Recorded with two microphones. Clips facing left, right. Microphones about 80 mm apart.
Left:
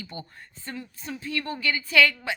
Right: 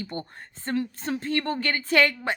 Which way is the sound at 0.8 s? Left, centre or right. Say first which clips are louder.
Right 9 dB; right.